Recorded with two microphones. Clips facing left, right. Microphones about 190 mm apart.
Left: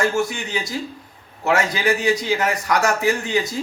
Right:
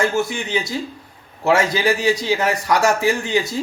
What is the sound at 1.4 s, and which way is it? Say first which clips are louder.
Speech: right 3 dB; 30° right (ahead or behind).